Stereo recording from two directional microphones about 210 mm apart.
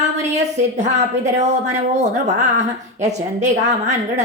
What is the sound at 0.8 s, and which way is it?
A woman's voice, 35° right (ahead or behind).